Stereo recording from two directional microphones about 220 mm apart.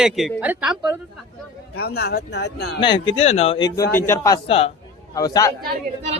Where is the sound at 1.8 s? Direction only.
45° left (ahead or behind).